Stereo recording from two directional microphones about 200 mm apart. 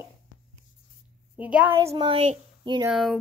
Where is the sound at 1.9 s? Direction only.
25° right (ahead or behind).